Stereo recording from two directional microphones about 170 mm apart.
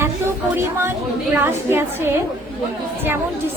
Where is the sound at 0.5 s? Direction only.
15° right (ahead or behind).